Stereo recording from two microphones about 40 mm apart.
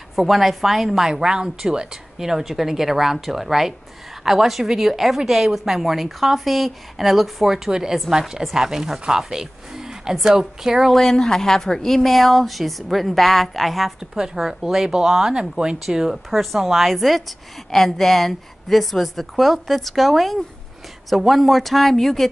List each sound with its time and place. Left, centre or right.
0.1 s a woman's voice: centre
7.5 s a woman's voice: centre
10.9 s a woman's voice: centre
14.1 s a woman's voice: centre
15.3 s a woman's voice: centre
16.3 s a woman's voice: centre